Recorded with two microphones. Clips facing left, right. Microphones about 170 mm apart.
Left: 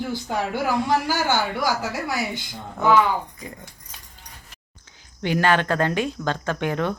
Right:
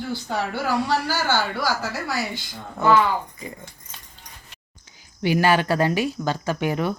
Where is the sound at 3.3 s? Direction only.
Centre (ahead or behind).